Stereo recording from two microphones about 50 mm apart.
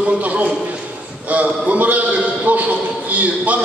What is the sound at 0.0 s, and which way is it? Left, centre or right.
A man's voice, right.